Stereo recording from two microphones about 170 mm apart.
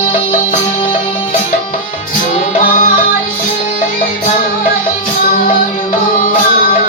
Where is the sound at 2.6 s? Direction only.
50° left (ahead or behind).